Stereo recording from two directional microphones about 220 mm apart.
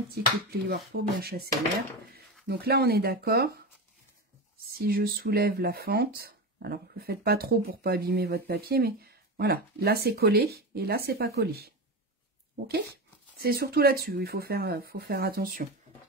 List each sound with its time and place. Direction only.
0.1 s speech: 45° right (ahead or behind)
4.7 s speech: 45° right (ahead or behind)
13.4 s speech: 45° right (ahead or behind)